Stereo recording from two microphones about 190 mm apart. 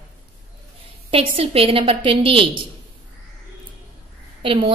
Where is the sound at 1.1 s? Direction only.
30° right (ahead or behind).